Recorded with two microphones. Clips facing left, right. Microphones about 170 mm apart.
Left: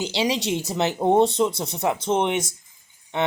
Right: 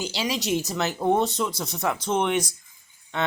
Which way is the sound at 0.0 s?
25° left (ahead or behind).